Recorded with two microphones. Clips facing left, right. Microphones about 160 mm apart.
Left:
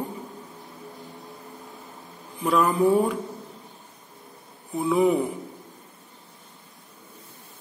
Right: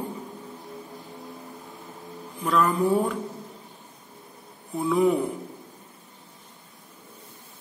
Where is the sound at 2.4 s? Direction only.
5° left (ahead or behind).